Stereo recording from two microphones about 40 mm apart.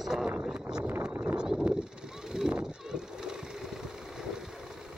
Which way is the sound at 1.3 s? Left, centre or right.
Centre.